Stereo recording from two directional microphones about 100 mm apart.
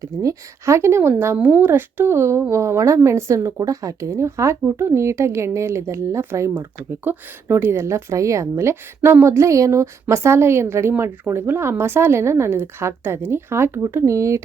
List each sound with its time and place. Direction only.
0.0 s speech: 35° right (ahead or behind)